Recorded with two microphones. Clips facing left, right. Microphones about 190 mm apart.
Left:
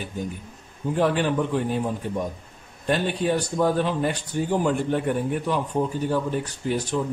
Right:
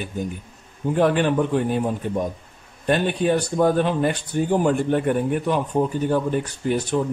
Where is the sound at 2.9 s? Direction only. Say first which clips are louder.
Right 3 dB; 55° right (ahead or behind).